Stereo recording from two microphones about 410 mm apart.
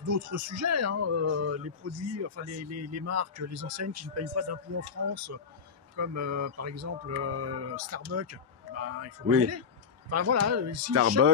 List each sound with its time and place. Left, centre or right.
0.1 s speech: right